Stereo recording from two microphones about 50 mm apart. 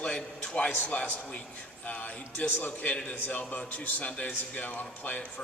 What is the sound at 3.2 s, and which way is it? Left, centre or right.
A man's voice, left.